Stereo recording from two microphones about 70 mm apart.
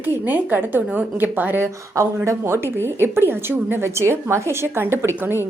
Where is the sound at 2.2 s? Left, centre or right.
Right.